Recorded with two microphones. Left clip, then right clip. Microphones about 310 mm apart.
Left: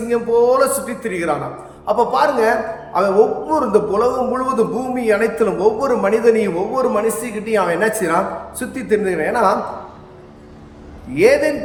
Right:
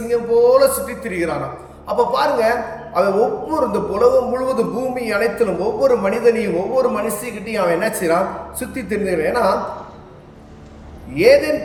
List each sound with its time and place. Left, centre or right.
0.1 s a man's voice: centre
11.1 s a man's voice: centre